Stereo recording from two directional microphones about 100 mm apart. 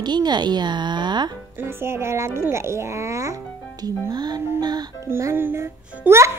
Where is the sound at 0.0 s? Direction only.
45° right (ahead or behind).